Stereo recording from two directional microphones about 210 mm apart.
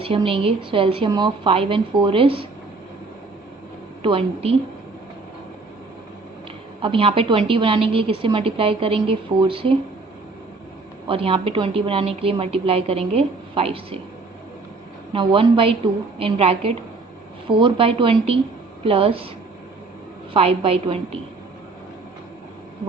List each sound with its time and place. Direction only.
0.0 s a woman's voice: 25° right (ahead or behind)
4.0 s a woman's voice: 25° right (ahead or behind)
6.8 s a woman's voice: 25° right (ahead or behind)
11.0 s a woman's voice: 25° right (ahead or behind)
15.1 s a woman's voice: 25° right (ahead or behind)
20.3 s a woman's voice: 25° right (ahead or behind)